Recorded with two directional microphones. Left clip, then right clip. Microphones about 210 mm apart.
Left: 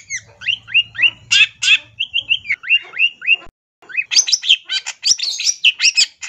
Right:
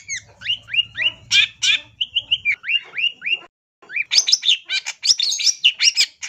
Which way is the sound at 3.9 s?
Centre (ahead or behind).